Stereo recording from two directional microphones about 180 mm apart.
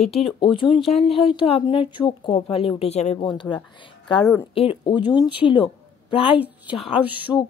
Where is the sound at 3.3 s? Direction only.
25° left (ahead or behind).